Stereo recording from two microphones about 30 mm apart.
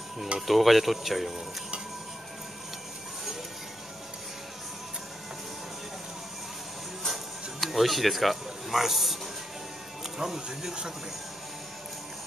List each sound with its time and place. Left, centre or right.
0.5 s speech: centre
7.6 s a man's voice: centre
10.1 s speech: centre